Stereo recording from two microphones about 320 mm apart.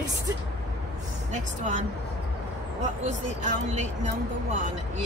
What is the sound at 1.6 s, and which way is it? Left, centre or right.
Speech, right.